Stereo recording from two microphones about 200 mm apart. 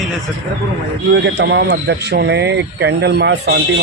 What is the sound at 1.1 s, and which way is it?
Speech, 60° right (ahead or behind).